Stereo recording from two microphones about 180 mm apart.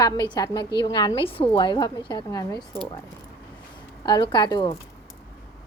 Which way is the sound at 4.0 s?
25° left (ahead or behind).